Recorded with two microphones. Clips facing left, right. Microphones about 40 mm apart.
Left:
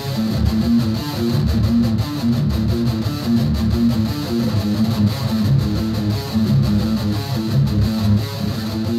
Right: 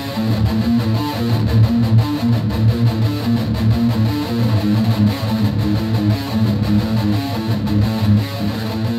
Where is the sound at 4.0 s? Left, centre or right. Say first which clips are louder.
Right 1 dB; right.